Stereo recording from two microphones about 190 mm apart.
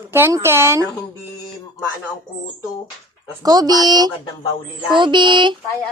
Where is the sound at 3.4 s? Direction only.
20° right (ahead or behind).